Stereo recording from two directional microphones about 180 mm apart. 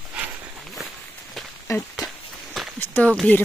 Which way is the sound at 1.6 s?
15° left (ahead or behind).